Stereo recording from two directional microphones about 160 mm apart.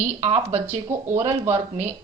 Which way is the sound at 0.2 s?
40° right (ahead or behind).